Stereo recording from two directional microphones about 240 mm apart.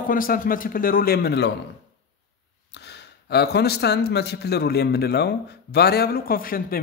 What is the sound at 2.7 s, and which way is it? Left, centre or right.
Speech, left.